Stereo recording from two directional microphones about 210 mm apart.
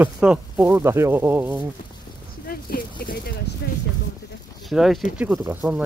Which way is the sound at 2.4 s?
45° left (ahead or behind).